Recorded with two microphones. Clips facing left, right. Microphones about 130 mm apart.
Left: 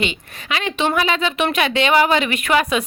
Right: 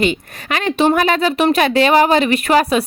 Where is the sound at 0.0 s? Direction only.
40° right (ahead or behind).